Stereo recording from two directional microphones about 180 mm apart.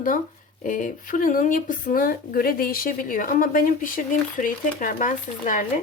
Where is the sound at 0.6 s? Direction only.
50° left (ahead or behind).